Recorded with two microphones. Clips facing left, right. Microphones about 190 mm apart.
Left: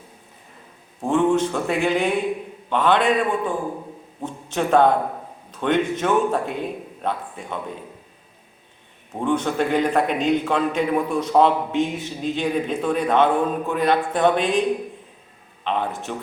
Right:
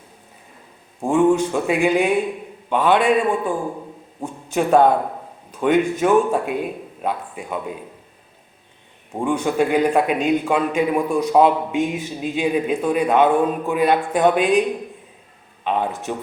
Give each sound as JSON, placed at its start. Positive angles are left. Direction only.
{"t": 1.0, "sound": "a man's voice", "side_deg": -10}
{"t": 4.5, "sound": "a man's voice", "side_deg": -10}
{"t": 9.1, "sound": "a man's voice", "side_deg": -10}
{"t": 15.6, "sound": "a man's voice", "side_deg": -10}